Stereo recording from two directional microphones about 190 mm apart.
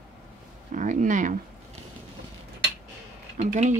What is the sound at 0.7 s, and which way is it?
Speech, 40° right (ahead or behind).